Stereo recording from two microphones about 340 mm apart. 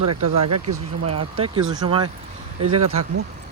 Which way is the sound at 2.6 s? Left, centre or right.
Right.